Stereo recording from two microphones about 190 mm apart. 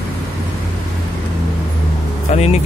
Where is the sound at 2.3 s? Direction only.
35° left (ahead or behind).